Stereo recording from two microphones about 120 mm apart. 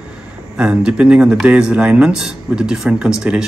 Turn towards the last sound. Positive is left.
turn(degrees=-5)  # may be behind; listen again after turning